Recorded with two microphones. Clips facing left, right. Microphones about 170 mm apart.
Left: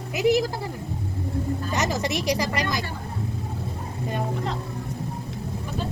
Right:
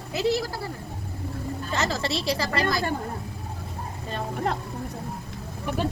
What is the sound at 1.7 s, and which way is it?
Speech, 15° left (ahead or behind).